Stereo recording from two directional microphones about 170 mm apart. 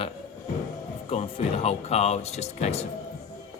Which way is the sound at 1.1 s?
40° left (ahead or behind).